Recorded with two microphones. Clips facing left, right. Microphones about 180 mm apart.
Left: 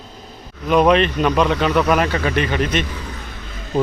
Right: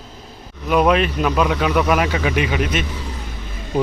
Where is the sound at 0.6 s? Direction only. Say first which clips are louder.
Left 2 dB; 5° right (ahead or behind).